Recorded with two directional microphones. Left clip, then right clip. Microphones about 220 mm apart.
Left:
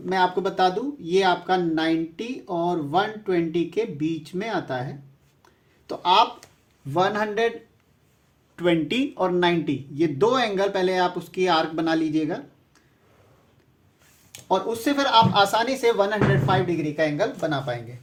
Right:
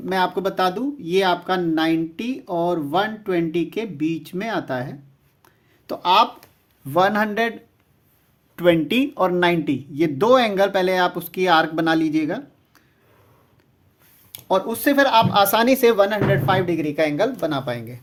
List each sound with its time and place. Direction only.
0.1 s speech: 45° right (ahead or behind)
8.5 s speech: 35° right (ahead or behind)
14.3 s speech: 40° right (ahead or behind)